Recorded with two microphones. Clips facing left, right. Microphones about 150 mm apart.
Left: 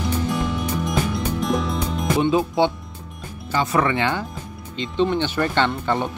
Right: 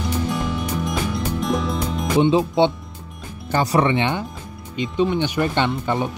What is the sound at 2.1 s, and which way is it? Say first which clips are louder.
Speech: right 3 dB; 20° right (ahead or behind).